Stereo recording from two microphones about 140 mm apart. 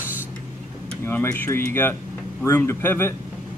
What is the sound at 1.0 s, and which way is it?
Speech, 15° left (ahead or behind).